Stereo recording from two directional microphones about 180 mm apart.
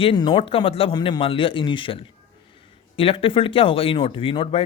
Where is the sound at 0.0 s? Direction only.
25° left (ahead or behind).